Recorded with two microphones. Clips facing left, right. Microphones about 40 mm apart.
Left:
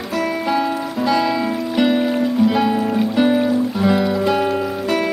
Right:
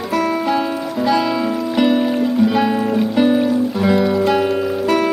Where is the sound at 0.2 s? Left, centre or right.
Centre.